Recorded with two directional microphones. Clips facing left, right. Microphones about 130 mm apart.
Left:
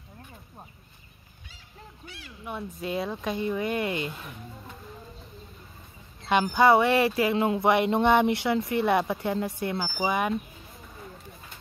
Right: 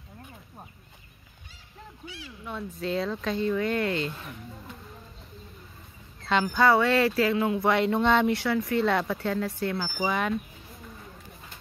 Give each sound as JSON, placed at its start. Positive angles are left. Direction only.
{"t": 2.0, "sound": "speech", "side_deg": 50}
{"t": 2.4, "sound": "speech", "side_deg": 10}
{"t": 6.4, "sound": "speech", "side_deg": 20}